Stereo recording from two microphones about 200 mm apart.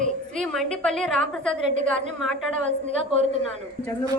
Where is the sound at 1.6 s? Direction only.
35° right (ahead or behind).